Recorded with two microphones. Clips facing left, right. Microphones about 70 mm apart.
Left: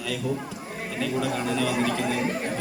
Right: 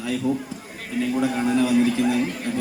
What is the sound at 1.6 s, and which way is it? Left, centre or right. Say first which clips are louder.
Speech: right 6 dB; left.